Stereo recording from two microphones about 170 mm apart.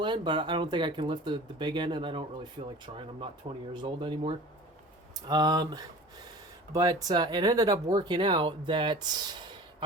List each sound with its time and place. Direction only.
0.0 s speech: 30° right (ahead or behind)